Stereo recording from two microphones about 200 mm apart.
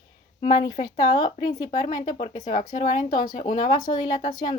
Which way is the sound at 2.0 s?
35° left (ahead or behind).